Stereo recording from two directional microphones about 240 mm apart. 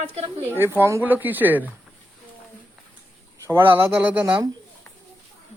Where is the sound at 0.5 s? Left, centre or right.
Centre.